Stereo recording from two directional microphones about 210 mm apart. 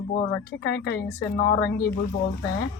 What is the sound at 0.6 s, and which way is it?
Speech, 50° left (ahead or behind).